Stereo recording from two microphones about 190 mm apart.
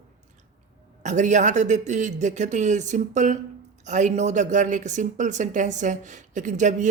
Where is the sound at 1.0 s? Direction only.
40° right (ahead or behind).